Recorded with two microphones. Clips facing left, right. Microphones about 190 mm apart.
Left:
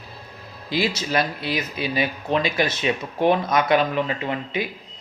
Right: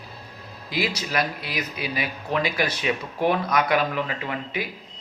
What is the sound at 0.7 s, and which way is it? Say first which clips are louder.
Speech: left 3 dB; 25° left (ahead or behind).